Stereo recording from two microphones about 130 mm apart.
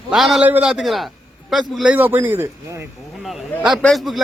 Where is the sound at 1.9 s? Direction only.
15° right (ahead or behind).